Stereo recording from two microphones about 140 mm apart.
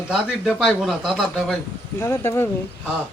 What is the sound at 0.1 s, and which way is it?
A man's voice, centre (ahead or behind).